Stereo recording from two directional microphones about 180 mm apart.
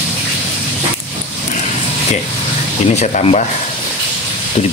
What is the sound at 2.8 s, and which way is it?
Speech, 35° left (ahead or behind).